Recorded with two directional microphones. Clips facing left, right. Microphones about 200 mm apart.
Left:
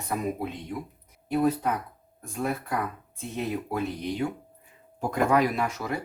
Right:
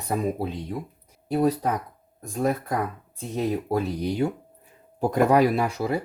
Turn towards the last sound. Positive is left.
turn(degrees=-30)  # may be behind; listen again after turning